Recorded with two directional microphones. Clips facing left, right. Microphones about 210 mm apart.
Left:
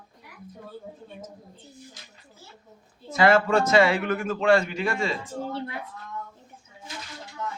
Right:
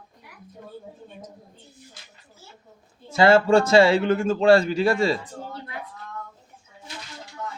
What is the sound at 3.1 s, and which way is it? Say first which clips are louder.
A man's voice: right 4 dB; 30° right (ahead or behind).